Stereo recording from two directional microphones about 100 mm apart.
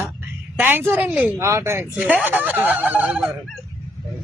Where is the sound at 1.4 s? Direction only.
30° right (ahead or behind).